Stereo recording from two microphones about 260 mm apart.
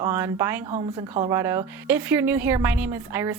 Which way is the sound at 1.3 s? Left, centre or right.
Centre.